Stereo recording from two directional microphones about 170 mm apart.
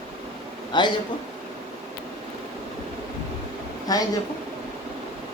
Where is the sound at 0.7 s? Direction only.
25° left (ahead or behind).